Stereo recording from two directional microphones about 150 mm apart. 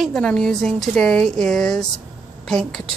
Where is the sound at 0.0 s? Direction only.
5° left (ahead or behind).